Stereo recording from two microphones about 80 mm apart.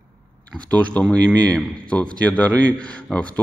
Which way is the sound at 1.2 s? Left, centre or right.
Centre.